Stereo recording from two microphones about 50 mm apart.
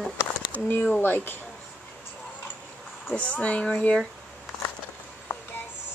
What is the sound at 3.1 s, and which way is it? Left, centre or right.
Speech, left.